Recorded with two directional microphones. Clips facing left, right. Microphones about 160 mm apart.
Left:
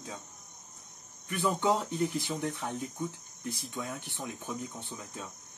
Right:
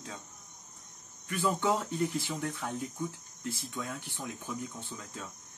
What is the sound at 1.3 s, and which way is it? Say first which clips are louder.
Speech: left 1 dB; 20° left (ahead or behind).